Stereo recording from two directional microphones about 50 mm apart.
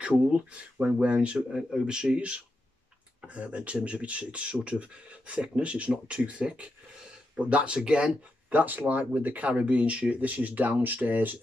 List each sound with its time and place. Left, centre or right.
0.0 s speech: centre
8.5 s speech: right